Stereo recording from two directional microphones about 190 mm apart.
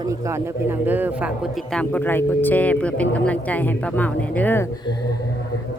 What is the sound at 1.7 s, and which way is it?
Speech, 5° left (ahead or behind).